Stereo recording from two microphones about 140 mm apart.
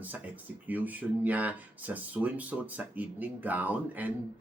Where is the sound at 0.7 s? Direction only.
10° right (ahead or behind).